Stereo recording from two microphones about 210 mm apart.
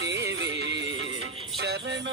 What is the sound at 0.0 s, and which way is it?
Music, 55° right (ahead or behind).